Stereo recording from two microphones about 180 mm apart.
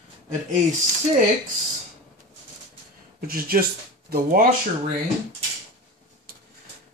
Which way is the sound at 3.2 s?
55° right (ahead or behind).